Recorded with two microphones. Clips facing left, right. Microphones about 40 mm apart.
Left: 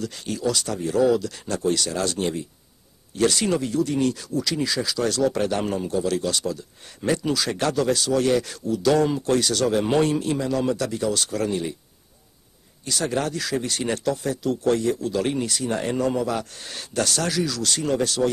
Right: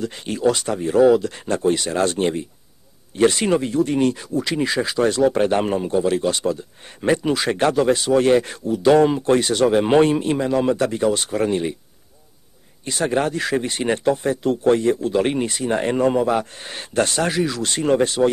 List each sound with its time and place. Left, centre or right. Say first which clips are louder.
0.0 s speech: right 6 dB; right
12.8 s speech: right 4 dB; right